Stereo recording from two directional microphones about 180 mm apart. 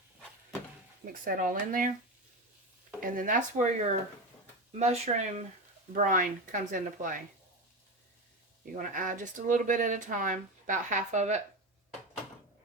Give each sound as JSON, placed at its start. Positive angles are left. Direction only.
{"t": 1.0, "sound": "speech", "side_deg": -50}
{"t": 3.0, "sound": "speech", "side_deg": -50}
{"t": 4.8, "sound": "speech", "side_deg": -35}
{"t": 8.7, "sound": "speech", "side_deg": -45}